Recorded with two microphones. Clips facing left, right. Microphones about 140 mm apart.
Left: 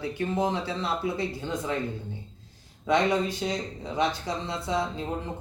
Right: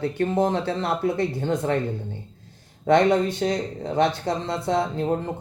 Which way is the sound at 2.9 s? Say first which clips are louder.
Right 6 dB; 55° right (ahead or behind).